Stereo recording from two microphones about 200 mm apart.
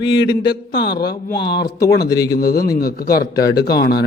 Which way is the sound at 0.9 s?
55° left (ahead or behind).